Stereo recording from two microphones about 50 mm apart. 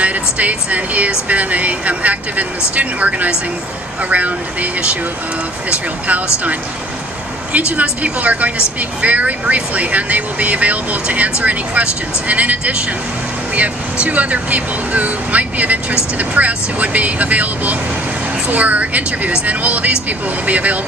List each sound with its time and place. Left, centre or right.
0.0 s speech: right
7.7 s speech: right